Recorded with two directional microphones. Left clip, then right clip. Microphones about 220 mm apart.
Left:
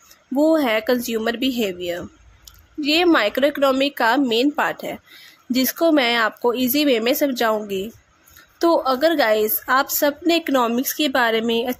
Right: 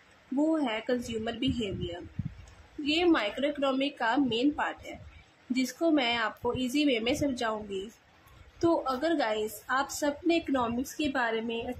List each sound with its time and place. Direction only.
0.5 s speech: 40° left (ahead or behind)
2.8 s a woman's voice: 40° left (ahead or behind)
8.5 s a woman's voice: 35° left (ahead or behind)